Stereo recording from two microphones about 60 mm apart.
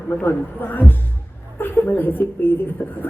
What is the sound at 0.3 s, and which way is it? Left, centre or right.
A woman's voice, left.